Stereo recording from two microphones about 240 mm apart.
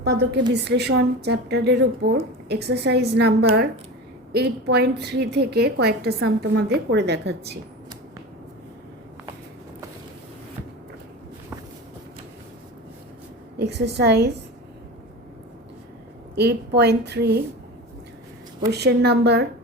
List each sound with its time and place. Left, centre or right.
0.0 s a woman's voice: right
13.6 s a woman's voice: right
16.3 s a woman's voice: right
18.7 s a woman's voice: right